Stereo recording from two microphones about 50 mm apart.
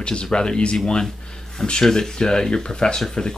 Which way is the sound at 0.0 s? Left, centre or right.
Centre.